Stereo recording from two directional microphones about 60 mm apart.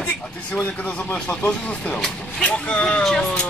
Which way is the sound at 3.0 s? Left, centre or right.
Centre.